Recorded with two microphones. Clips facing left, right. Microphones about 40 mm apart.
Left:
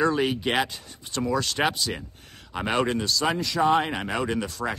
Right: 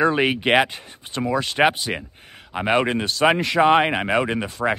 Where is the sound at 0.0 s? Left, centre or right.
Right.